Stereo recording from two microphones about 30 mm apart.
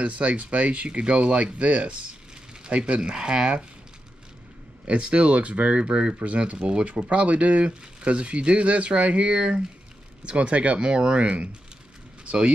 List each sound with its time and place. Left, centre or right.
0.0 s speech: right
4.8 s speech: right
10.8 s speech: right